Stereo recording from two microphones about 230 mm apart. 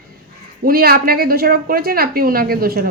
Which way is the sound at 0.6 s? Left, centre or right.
Right.